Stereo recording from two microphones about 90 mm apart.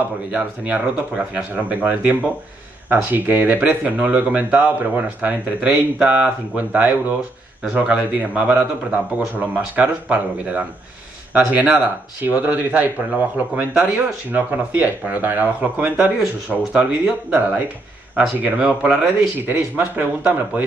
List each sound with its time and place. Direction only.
0.3 s speech: 15° right (ahead or behind)
18.4 s speech: 15° right (ahead or behind)